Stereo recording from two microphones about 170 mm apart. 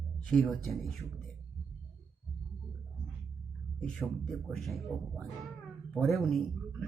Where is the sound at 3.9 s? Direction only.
Centre (ahead or behind).